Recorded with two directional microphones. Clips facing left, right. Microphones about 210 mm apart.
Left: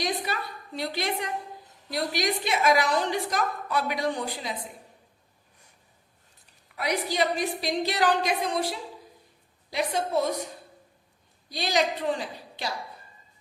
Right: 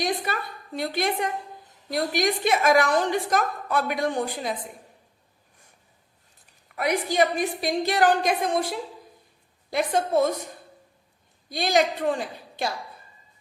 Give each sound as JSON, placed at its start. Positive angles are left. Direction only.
{"t": 0.0, "sound": "a woman's voice", "side_deg": -50}
{"t": 6.7, "sound": "a woman's voice", "side_deg": -50}
{"t": 11.4, "sound": "a woman's voice", "side_deg": -50}